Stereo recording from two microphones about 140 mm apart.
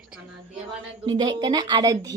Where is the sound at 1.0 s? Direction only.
30° right (ahead or behind).